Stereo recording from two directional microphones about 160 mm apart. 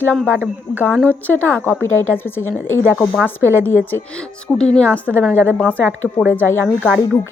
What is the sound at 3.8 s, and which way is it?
A woman's voice, 10° left (ahead or behind).